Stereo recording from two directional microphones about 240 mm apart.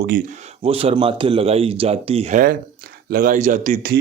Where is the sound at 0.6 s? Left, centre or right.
Right.